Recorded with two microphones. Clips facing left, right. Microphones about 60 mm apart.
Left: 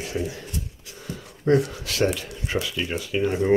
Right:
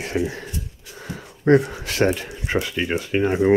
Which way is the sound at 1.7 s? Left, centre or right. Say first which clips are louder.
Right 3 dB; right.